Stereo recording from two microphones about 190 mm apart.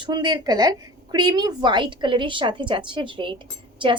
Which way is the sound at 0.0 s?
20° right (ahead or behind).